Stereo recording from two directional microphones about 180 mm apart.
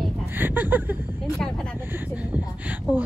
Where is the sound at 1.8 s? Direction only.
10° right (ahead or behind).